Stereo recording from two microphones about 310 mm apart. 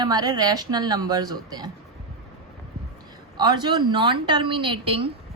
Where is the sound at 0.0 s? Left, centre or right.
Centre.